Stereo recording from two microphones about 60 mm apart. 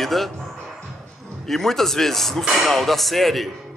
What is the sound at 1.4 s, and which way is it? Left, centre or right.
A man's voice, centre.